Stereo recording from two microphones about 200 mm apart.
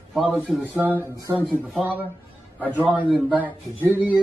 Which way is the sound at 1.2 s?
15° right (ahead or behind).